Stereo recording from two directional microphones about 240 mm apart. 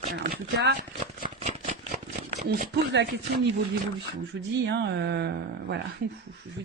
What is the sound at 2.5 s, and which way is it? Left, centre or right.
Speech, right.